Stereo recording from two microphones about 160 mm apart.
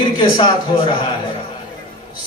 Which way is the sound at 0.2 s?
30° left (ahead or behind).